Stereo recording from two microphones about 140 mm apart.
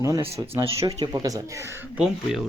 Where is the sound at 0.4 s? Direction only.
30° right (ahead or behind).